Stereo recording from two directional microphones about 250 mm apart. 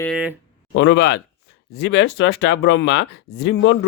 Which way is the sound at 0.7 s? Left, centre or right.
Left.